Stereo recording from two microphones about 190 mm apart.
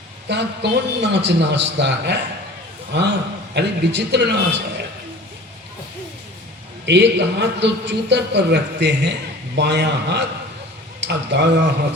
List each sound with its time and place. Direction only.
0.3 s a man's voice: 65° right (ahead or behind)
6.8 s a man's voice: 65° right (ahead or behind)